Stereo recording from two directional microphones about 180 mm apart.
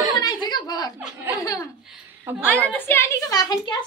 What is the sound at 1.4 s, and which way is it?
Speech, 20° left (ahead or behind).